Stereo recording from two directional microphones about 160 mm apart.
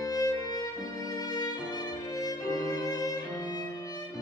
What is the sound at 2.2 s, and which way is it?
Music, 25° left (ahead or behind).